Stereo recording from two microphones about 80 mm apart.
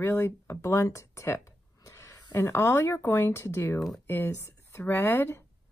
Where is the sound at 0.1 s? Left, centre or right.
Left.